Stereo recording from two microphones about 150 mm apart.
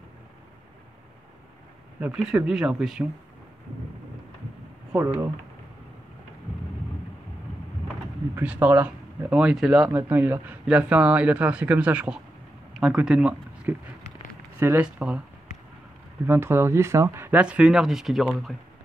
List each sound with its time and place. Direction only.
2.1 s speech: 5° right (ahead or behind)
4.9 s speech: 15° right (ahead or behind)
8.4 s speech: 10° right (ahead or behind)
16.3 s speech: 15° right (ahead or behind)